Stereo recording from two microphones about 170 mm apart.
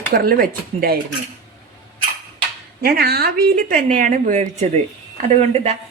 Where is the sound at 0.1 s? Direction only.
60° right (ahead or behind).